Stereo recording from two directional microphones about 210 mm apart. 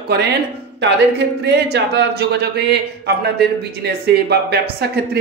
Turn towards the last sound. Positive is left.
turn(degrees=-50)  # may be behind; listen again after turning